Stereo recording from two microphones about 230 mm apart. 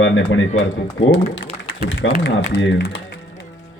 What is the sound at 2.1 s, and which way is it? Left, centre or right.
Speech, left.